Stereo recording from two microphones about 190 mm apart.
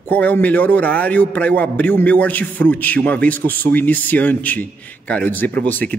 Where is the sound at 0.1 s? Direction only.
10° left (ahead or behind).